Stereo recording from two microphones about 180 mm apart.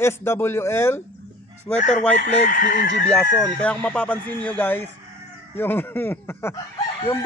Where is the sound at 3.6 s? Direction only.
5° left (ahead or behind).